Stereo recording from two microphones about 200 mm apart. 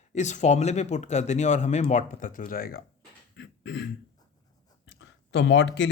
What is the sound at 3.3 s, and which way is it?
Beatboxing, 65° left (ahead or behind).